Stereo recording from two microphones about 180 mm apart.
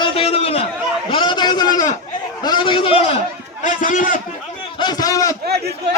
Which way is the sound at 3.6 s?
45° left (ahead or behind).